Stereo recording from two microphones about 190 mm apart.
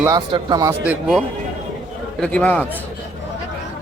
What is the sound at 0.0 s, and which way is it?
Speech, 20° right (ahead or behind).